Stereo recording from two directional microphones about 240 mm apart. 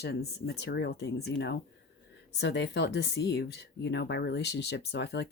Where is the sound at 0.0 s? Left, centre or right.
Left.